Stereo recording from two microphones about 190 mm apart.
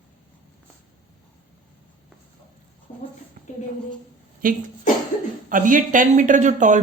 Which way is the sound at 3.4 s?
45° right (ahead or behind).